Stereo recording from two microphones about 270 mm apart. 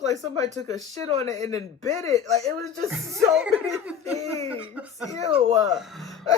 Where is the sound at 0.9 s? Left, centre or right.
Right.